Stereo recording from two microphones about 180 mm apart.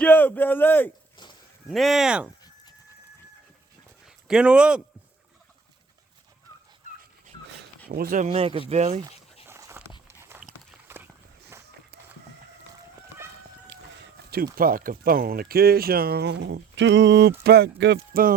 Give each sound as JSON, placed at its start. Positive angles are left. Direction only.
{"t": 0.0, "sound": "speech", "side_deg": 10}
{"t": 1.7, "sound": "speech", "side_deg": 0}
{"t": 4.0, "sound": "a sound", "side_deg": -5}
{"t": 7.9, "sound": "speech", "side_deg": -55}
{"t": 8.3, "sound": "speech", "side_deg": -30}
{"t": 9.5, "sound": "a sound", "side_deg": -15}
{"t": 10.1, "sound": "dog", "side_deg": -15}
{"t": 10.8, "sound": "walk", "side_deg": -10}
{"t": 14.3, "sound": "speech", "side_deg": -60}